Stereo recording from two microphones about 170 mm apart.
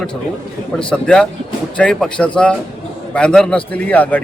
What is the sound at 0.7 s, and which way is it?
A man's voice, 5° left (ahead or behind).